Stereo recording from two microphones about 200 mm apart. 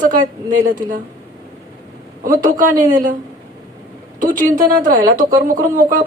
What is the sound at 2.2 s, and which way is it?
Speech, 40° right (ahead or behind).